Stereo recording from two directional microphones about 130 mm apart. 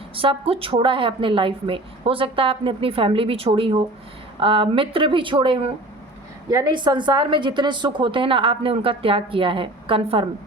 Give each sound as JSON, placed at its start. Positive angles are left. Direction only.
{"t": 0.2, "sound": "a woman's voice", "side_deg": -45}
{"t": 6.5, "sound": "a woman's voice", "side_deg": -25}
{"t": 6.7, "sound": "a woman's voice", "side_deg": -35}